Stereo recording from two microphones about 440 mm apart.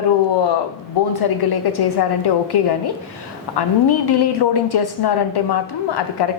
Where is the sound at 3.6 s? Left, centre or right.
Left.